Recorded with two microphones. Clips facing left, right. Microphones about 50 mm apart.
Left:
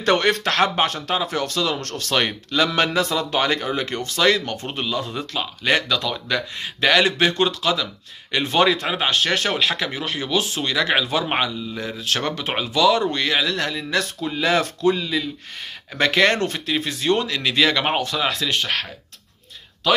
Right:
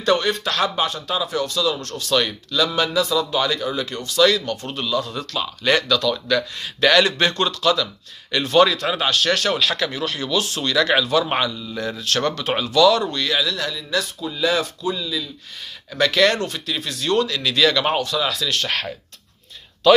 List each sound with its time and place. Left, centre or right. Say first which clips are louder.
0.0 s speech: left 1 dB; left; by 13.1 s centre
13.1 s speech: left 1 dB; left
15.9 s speech: even; left